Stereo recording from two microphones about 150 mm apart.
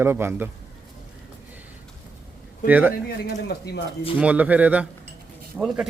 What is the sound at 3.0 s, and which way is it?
Speech, 90° left.